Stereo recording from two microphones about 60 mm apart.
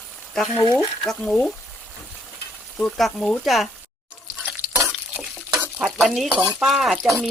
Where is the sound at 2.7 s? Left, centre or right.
Centre.